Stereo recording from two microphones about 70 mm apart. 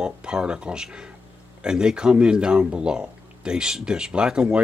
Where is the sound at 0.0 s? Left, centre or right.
Centre.